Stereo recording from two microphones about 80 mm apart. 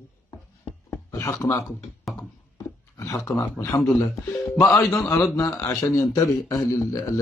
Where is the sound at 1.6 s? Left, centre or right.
Centre.